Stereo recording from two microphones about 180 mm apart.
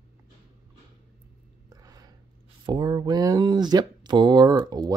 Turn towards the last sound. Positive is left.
turn(degrees=-20)  # may be behind; listen again after turning